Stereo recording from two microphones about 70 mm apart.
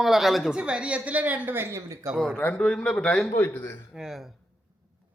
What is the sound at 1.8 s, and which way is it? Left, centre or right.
Speech, right.